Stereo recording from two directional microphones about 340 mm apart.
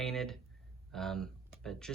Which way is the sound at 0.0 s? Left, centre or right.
Centre.